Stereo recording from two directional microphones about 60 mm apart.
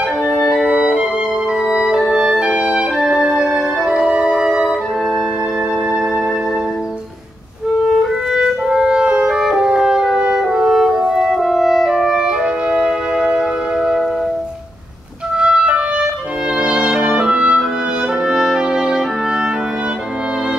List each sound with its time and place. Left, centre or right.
0.3 s music: centre
7.9 s clarinet: centre
12.7 s music: centre
15.3 s clarinet: centre
16.6 s music: centre